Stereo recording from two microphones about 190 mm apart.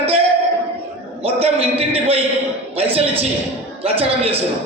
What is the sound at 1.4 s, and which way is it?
Speech, 30° right (ahead or behind).